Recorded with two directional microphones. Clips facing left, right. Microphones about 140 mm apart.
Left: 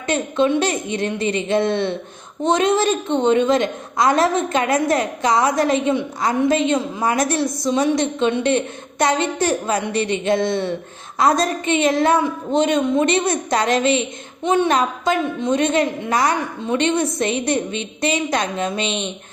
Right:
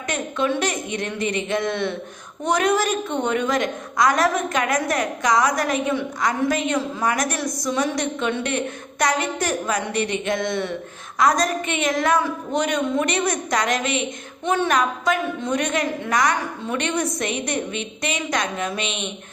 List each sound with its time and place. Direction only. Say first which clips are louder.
0.1 s a woman's voice: left 6 dB; 25° left (ahead or behind)